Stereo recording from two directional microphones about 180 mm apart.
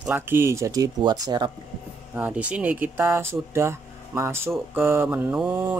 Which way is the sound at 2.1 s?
10° right (ahead or behind).